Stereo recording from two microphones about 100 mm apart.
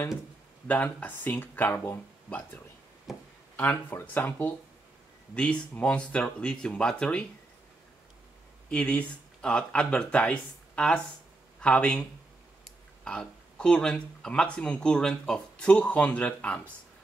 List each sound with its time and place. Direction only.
0.7 s speech: 15° left (ahead or behind)
3.1 s speech: centre (ahead or behind)
3.5 s speech: 15° left (ahead or behind)
8.6 s speech: 10° left (ahead or behind)